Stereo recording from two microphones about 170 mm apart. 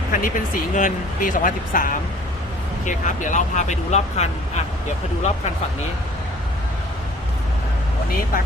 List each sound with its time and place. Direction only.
0.1 s speech: 55° left (ahead or behind)